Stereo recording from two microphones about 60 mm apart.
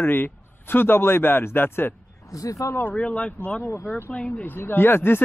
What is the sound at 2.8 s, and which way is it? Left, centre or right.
Speech, left.